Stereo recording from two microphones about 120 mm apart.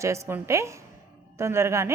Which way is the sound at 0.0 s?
25° right (ahead or behind).